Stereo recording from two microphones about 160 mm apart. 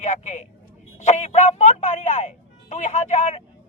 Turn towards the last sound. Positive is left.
turn(degrees=50)  # may be behind; listen again after turning